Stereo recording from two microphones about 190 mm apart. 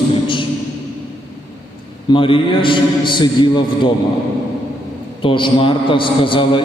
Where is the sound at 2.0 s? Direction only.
25° left (ahead or behind).